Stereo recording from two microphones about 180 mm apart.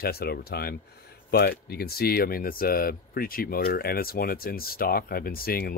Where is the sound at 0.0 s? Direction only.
60° left (ahead or behind).